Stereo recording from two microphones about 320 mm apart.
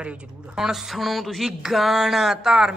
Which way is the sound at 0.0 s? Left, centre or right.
Centre.